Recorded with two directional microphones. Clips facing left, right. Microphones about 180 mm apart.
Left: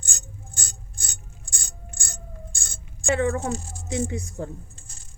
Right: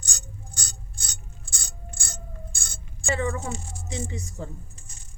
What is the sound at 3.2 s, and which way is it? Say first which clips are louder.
Speech: left 5 dB; 60° left (ahead or behind).